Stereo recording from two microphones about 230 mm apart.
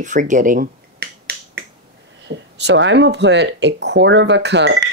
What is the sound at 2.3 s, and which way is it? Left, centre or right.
Speech, right.